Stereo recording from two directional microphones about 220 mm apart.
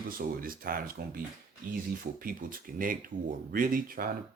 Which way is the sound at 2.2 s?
40° right (ahead or behind).